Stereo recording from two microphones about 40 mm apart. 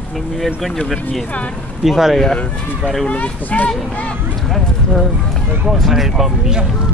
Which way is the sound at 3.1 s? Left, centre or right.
Left.